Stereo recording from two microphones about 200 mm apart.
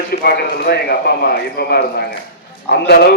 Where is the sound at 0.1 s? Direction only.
50° left (ahead or behind).